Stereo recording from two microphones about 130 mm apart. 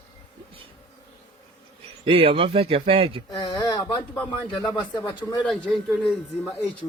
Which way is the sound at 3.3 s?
35° left (ahead or behind).